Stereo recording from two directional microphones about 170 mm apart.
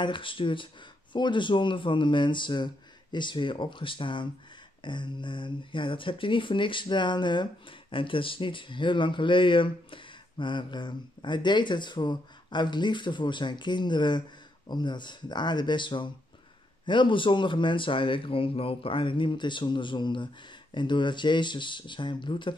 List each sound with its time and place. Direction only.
0.0 s speech: 30° left (ahead or behind)